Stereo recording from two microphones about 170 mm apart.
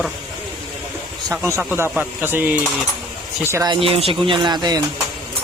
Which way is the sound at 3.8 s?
35° right (ahead or behind).